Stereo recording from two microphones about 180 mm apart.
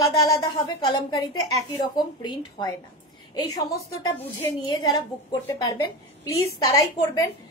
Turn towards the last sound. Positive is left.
turn(degrees=20)  # may be behind; listen again after turning